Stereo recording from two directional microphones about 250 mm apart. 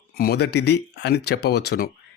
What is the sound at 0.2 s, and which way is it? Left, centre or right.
Speech, left.